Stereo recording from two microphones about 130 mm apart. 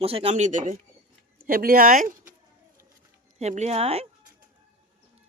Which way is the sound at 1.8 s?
90° right.